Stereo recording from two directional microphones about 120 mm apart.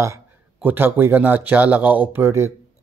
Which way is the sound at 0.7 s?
15° right (ahead or behind).